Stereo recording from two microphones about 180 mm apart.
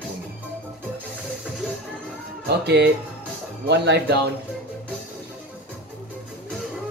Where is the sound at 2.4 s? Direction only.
65° right (ahead or behind).